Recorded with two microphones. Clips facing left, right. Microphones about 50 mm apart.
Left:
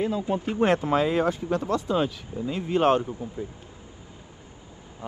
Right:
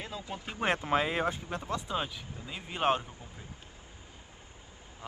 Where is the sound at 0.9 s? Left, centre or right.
Right.